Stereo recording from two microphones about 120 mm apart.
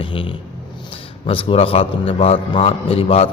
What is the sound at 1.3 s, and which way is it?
A man's voice, 45° left (ahead or behind).